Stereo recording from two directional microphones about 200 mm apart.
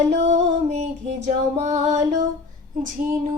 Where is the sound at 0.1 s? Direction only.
35° right (ahead or behind).